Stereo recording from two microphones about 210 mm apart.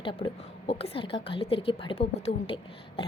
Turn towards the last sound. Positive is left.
turn(degrees=30)  # may be behind; listen again after turning